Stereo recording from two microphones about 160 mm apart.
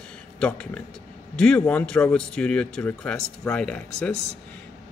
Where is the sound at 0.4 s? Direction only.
5° left (ahead or behind).